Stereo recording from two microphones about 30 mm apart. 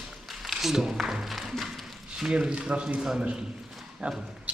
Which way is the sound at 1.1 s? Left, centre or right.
Centre.